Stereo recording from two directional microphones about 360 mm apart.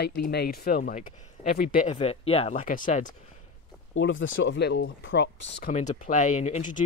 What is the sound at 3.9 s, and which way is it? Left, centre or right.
Speech, left.